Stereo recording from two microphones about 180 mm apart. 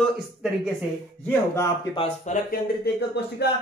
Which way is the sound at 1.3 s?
15° left (ahead or behind).